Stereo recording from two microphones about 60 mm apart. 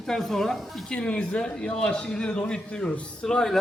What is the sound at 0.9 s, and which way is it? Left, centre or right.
A man's voice, left.